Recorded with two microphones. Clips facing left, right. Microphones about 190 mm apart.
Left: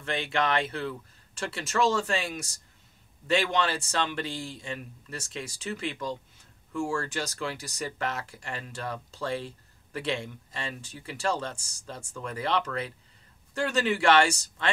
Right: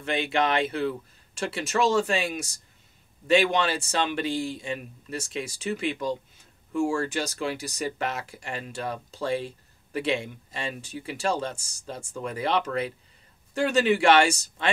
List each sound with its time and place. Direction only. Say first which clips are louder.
0.0 s speech: right 3 dB; 15° right (ahead or behind)